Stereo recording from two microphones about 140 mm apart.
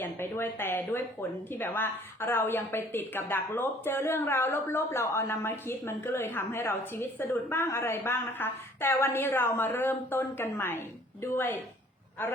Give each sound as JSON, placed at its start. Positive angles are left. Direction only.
{"t": 0.0, "sound": "a woman's voice", "side_deg": 15}